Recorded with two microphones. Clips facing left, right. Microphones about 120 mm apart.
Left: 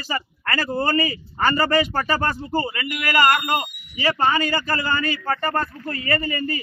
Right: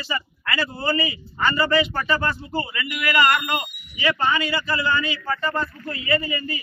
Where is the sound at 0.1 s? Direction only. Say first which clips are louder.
Left 2 dB; 45° left (ahead or behind).